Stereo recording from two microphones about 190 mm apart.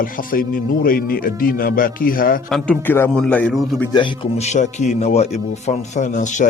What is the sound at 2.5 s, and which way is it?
A man's voice, 10° left (ahead or behind).